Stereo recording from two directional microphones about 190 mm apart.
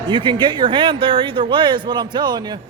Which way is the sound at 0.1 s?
25° right (ahead or behind).